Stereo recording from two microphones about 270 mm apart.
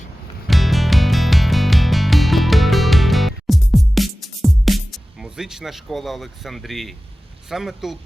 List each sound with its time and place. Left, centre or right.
0.4 s music: centre
7.5 s speech: centre